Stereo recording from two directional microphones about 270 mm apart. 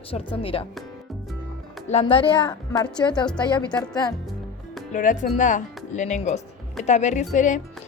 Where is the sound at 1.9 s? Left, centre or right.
Left.